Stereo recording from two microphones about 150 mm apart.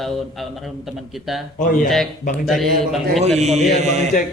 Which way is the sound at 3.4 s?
50° right (ahead or behind).